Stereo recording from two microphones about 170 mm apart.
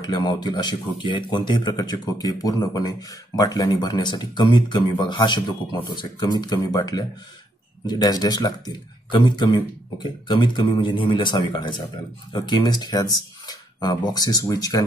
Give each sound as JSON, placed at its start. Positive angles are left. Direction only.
{"t": 0.0, "sound": "speech", "side_deg": 25}